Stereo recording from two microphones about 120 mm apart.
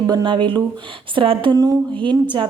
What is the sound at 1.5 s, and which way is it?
Speech, 30° right (ahead or behind).